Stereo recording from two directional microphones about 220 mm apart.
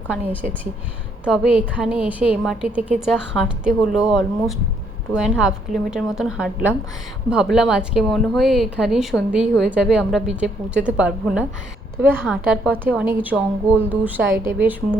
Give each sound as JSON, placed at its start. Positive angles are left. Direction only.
{"t": 0.3, "sound": "a woman's voice", "side_deg": -10}